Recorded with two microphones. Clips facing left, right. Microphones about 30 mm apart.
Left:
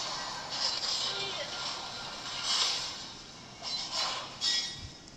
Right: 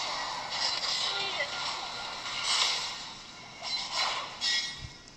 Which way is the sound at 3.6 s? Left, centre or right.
Centre.